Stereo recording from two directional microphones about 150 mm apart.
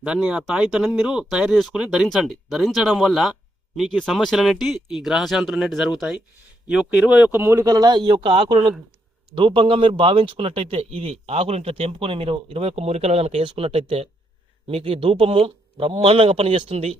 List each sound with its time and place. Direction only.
0.0 s speech: 5° right (ahead or behind); by 17.0 s 40° right (ahead or behind)